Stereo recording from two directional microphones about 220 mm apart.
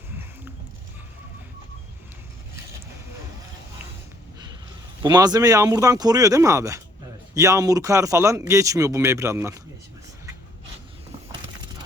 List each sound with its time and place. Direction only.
5.0 s speech: 15° right (ahead or behind)